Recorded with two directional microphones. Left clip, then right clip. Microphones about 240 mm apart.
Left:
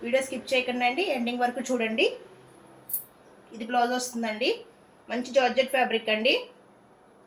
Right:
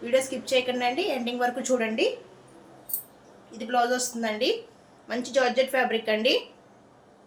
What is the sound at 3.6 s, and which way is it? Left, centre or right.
A woman's voice, centre.